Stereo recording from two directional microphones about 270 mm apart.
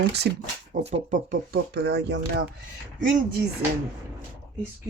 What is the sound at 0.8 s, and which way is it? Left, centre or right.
Speech, right.